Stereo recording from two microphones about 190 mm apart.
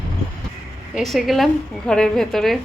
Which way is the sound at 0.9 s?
Centre (ahead or behind).